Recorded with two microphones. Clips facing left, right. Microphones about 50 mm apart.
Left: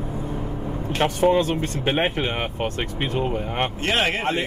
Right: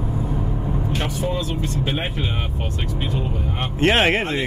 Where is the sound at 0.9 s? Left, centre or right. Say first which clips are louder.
Left 10 dB; left.